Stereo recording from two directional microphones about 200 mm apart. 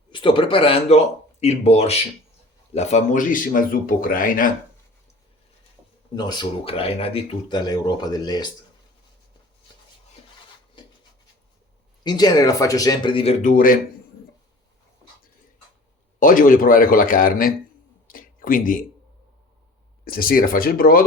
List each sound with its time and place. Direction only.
0.1 s speech: 25° left (ahead or behind); by 4.5 s 45° left (ahead or behind)
6.1 s speech: 20° left (ahead or behind)
12.0 s speech: 20° left (ahead or behind)
13.4 s speech: 45° left (ahead or behind)
16.2 s speech: 40° left (ahead or behind)
18.1 s a sound: 45° left (ahead or behind)
20.1 s speech: 45° left (ahead or behind)